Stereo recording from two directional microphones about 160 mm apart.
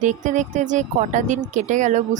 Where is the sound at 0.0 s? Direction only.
50° right (ahead or behind).